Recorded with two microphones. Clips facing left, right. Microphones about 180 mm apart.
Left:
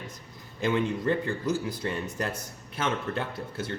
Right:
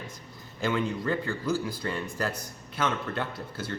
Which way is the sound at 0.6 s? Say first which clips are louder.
Left 2 dB; 25° left (ahead or behind).